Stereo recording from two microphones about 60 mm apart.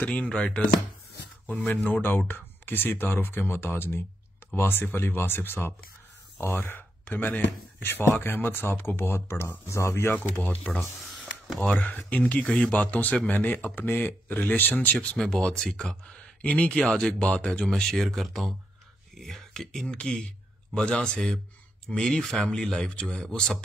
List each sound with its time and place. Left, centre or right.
0.0 s speech: left
1.9 s speech: left
7.1 s speech: left
10.5 s speech: centre
11.1 s a sound: centre
11.6 s speech: left
15.0 s speech: centre
19.1 s a sound: centre
19.9 s speech: centre